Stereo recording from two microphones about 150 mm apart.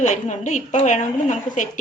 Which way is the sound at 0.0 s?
55° left (ahead or behind).